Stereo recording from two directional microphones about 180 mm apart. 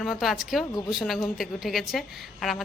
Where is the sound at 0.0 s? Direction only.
Centre (ahead or behind).